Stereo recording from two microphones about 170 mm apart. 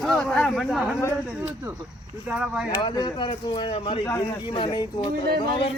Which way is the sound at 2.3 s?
5° right (ahead or behind).